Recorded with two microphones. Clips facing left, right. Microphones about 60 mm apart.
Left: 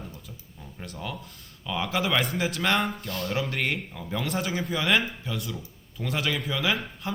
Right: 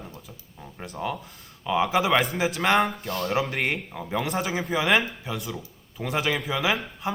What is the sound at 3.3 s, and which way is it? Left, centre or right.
Speech, right.